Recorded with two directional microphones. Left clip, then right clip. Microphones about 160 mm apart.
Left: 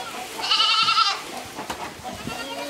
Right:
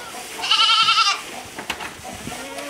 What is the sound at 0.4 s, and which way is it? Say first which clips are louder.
Goat: right 3 dB; 5° right (ahead or behind).